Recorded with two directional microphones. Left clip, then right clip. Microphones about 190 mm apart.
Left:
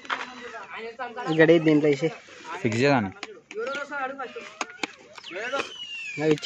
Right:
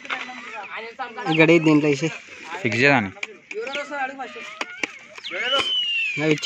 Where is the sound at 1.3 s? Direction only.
50° right (ahead or behind).